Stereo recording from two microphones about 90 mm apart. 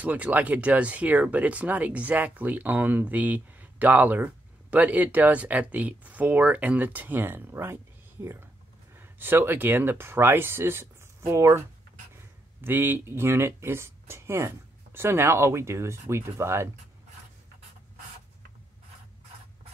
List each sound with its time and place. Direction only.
0.0 s speech: 20° right (ahead or behind)
12.6 s speech: 25° right (ahead or behind)